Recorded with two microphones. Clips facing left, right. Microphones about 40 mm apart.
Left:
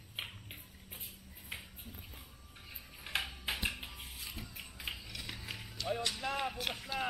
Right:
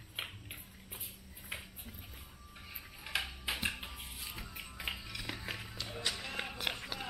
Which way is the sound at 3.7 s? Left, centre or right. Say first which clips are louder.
Right 1 dB; centre.